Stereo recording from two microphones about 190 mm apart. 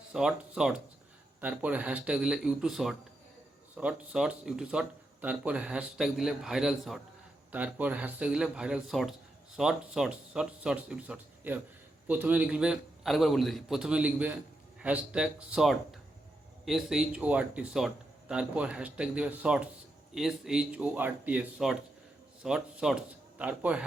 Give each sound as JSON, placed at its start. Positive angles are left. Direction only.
{"t": 0.1, "sound": "speech", "side_deg": -5}